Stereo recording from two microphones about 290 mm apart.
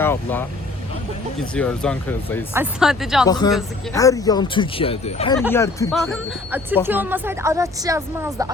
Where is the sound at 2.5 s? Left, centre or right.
Centre.